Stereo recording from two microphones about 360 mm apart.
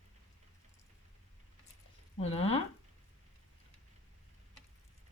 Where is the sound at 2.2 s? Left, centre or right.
Centre.